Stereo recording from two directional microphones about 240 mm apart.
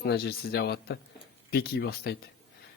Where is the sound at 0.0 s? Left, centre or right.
Left.